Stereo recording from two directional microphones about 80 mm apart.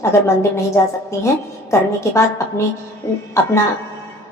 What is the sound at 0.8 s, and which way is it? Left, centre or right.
Speech, left.